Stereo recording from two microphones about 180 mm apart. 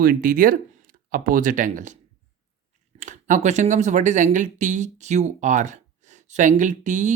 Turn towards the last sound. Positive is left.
turn(degrees=-45)  # may be behind; listen again after turning